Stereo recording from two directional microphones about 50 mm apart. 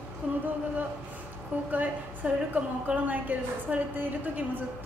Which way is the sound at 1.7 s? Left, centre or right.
Right.